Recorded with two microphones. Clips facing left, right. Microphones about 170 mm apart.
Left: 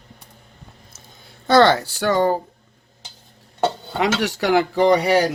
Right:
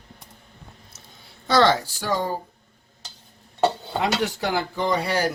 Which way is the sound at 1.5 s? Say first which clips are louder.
Left 4 dB; 60° left (ahead or behind).